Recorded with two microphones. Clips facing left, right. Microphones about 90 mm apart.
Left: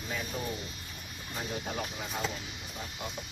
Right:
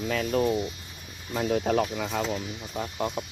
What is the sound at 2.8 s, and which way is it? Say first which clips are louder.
Speech: right 11 dB; 50° right (ahead or behind).